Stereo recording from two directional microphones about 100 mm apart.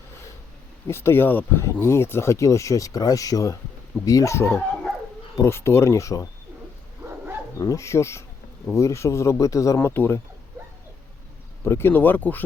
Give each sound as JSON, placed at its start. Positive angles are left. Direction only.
{"t": 0.9, "sound": "speech", "side_deg": 25}
{"t": 7.6, "sound": "speech", "side_deg": 30}
{"t": 11.6, "sound": "speech", "side_deg": 25}